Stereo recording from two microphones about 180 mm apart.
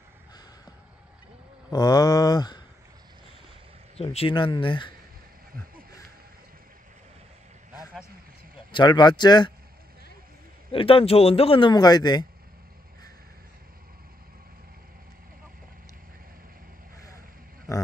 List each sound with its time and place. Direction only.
1.7 s speech: 20° left (ahead or behind)
3.9 s speech: 35° left (ahead or behind)
8.5 s speech: 25° left (ahead or behind)
10.7 s speech: 30° left (ahead or behind)
17.7 s a sound: 20° left (ahead or behind)